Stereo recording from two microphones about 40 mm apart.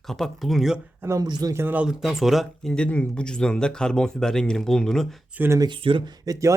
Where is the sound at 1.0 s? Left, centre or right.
Right.